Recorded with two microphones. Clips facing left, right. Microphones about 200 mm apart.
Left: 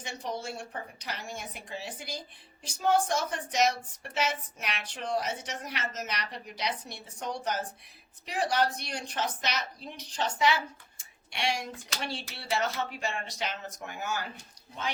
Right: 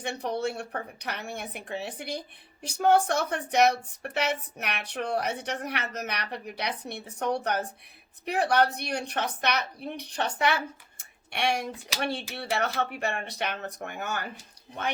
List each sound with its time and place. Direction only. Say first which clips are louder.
0.0 s speech: right 7 dB; 60° right (ahead or behind)